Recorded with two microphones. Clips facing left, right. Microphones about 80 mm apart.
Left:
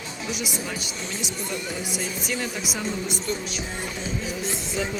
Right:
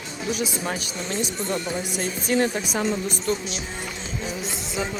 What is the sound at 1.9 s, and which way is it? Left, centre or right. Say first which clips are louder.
Speech: right 10 dB; right.